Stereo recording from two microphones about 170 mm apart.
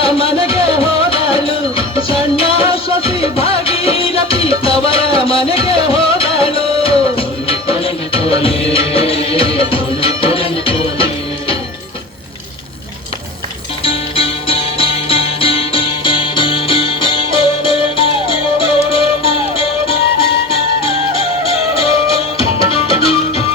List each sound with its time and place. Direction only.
0.0 s music: 35° left (ahead or behind)
13.8 s music: 35° left (ahead or behind)
22.4 s music: 35° left (ahead or behind)